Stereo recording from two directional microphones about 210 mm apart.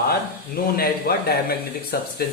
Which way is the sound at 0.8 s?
45° left (ahead or behind).